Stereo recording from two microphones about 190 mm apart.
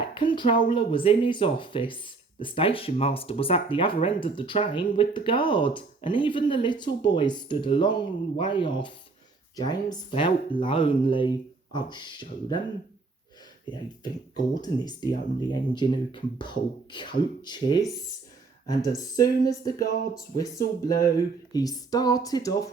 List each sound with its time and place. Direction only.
0.1 s speech: 25° left (ahead or behind)
14.5 s speech: 20° left (ahead or behind)